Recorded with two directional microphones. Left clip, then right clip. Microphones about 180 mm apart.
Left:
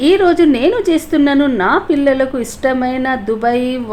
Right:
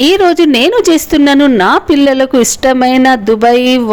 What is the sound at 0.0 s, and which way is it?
A woman's voice, 50° right (ahead or behind).